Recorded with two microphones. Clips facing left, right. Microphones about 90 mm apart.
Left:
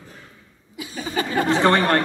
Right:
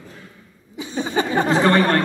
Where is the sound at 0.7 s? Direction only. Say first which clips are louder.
Right 4 dB; 30° right (ahead or behind).